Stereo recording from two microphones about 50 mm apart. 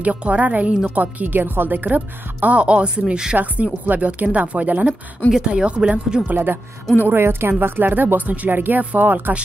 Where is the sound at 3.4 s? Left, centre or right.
Right.